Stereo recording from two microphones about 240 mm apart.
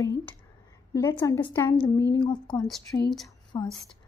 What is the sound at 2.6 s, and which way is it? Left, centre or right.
Speech, centre.